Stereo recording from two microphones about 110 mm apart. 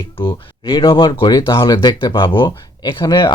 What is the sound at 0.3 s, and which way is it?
Speech, 45° left (ahead or behind).